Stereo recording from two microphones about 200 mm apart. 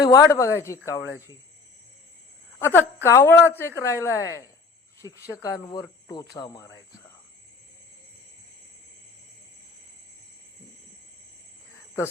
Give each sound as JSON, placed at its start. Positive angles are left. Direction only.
{"t": 0.0, "sound": "a woman's voice", "side_deg": 15}
{"t": 2.6, "sound": "a woman's voice", "side_deg": 10}